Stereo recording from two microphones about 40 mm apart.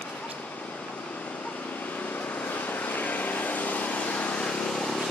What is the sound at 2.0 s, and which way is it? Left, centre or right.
Vehicle, left.